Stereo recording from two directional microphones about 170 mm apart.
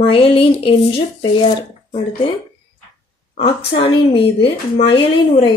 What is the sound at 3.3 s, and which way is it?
Speech, 35° left (ahead or behind).